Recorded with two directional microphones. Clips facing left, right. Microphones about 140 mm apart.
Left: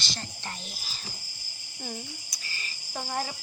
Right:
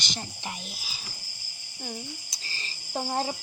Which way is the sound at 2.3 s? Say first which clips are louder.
Even; 30° right (ahead or behind).